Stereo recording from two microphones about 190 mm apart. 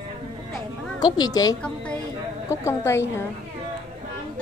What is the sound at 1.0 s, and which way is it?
A woman's voice, 20° left (ahead or behind).